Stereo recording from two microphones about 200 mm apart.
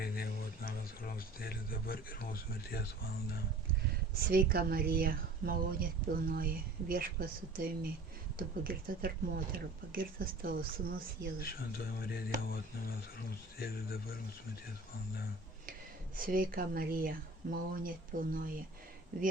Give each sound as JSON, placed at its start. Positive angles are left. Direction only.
{"t": 0.0, "sound": "speech", "side_deg": 50}
{"t": 4.2, "sound": "speech", "side_deg": -50}
{"t": 11.9, "sound": "speech", "side_deg": 50}
{"t": 13.6, "sound": "speech", "side_deg": 50}
{"t": 16.1, "sound": "speech", "side_deg": -45}